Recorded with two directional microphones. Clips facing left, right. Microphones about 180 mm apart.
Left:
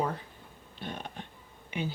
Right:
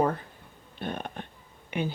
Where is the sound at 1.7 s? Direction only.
55° right (ahead or behind).